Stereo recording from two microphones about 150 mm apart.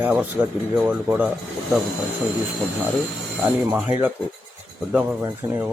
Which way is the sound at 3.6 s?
10° right (ahead or behind).